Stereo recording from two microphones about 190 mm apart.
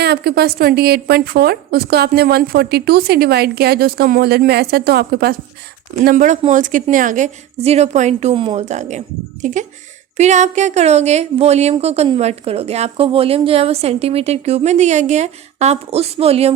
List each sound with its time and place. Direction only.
0.0 s a woman's voice: 55° right (ahead or behind)
6.1 s speech: 40° right (ahead or behind)